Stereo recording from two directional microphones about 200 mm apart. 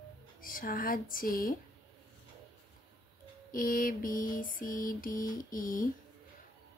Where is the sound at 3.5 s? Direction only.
45° left (ahead or behind).